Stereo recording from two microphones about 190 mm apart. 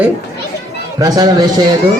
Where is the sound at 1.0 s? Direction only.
20° right (ahead or behind).